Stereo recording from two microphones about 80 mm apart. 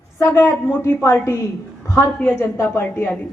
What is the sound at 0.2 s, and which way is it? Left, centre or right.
A woman's voice, left.